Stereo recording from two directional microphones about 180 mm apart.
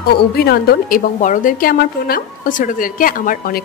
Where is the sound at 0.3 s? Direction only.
60° left (ahead or behind).